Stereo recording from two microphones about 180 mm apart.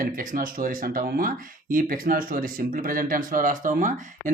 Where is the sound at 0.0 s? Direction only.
50° right (ahead or behind).